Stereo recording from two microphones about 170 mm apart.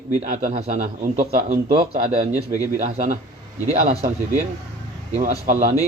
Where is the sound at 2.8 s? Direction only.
40° right (ahead or behind).